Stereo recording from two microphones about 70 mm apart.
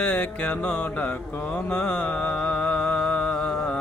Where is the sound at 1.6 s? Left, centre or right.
Centre.